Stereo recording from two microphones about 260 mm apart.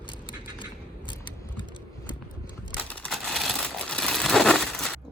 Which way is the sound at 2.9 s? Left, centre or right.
Centre.